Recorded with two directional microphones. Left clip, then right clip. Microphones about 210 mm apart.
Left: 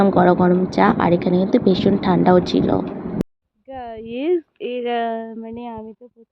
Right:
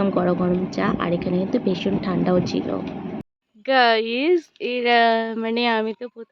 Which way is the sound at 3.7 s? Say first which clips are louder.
Right 13 dB; 15° right (ahead or behind).